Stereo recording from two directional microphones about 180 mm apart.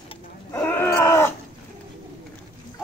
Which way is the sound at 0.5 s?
10° left (ahead or behind).